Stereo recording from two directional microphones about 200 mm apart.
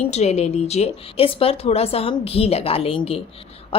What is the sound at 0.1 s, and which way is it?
A woman's voice, 35° left (ahead or behind).